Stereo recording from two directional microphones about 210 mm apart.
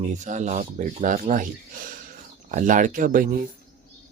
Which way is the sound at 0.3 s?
35° right (ahead or behind).